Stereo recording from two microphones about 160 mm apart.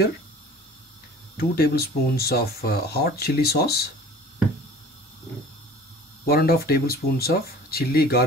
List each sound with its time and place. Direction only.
1.3 s speech: 75° left (ahead or behind)
6.2 s speech: 70° left (ahead or behind)